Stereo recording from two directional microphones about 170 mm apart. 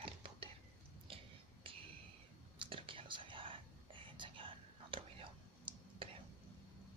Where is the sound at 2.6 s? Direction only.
30° right (ahead or behind).